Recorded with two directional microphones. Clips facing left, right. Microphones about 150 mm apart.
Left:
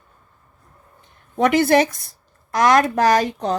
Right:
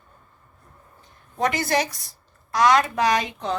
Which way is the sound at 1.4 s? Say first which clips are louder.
Left 8 dB; 60° left (ahead or behind).